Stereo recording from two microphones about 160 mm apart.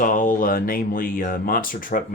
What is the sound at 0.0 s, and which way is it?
Speech, 55° left (ahead or behind).